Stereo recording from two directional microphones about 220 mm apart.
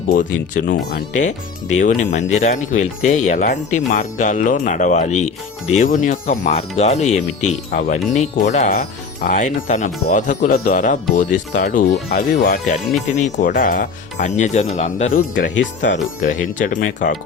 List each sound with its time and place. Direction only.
0.7 s speech: 45° left (ahead or behind)
1.7 s speech: 35° left (ahead or behind)
15.5 s speech: 55° left (ahead or behind)
16.2 s speech: 35° left (ahead or behind)